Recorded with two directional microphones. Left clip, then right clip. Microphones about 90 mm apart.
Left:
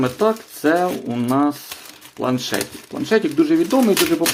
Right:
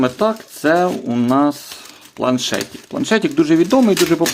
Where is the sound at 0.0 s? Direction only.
55° right (ahead or behind).